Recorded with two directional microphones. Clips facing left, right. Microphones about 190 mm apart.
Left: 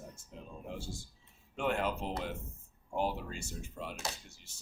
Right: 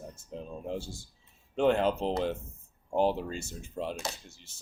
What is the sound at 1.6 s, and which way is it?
Speech, 30° right (ahead or behind).